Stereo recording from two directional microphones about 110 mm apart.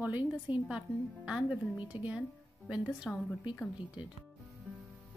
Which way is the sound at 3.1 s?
10° left (ahead or behind).